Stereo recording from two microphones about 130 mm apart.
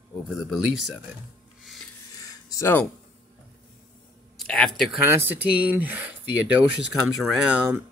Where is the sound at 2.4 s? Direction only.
25° left (ahead or behind).